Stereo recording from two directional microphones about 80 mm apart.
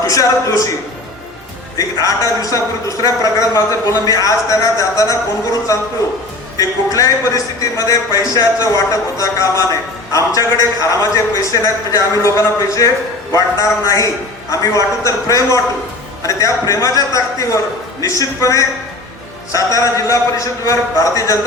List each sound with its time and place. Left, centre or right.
0.1 s a man's voice: left
2.0 s a man's voice: left
6.6 s a man's voice: left